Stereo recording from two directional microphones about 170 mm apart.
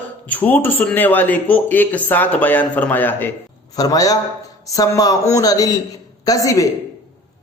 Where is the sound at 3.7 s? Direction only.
20° left (ahead or behind).